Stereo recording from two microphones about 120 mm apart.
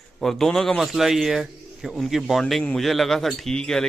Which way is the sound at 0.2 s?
5° left (ahead or behind).